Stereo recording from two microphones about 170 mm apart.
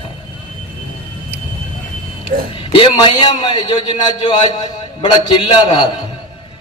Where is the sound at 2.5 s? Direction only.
30° left (ahead or behind).